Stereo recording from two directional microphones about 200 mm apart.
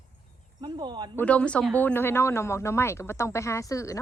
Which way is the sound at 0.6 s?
20° right (ahead or behind).